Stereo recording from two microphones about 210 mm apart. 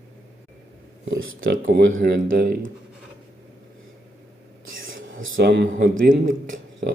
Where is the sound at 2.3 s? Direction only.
50° right (ahead or behind).